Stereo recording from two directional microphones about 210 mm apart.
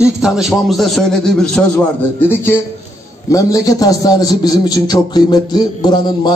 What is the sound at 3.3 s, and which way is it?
A man's voice, 15° left (ahead or behind).